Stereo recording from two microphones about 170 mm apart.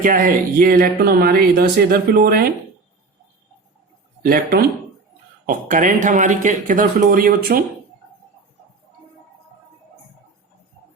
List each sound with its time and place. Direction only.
0.0 s speech: 55° right (ahead or behind)
4.2 s speech: 60° right (ahead or behind)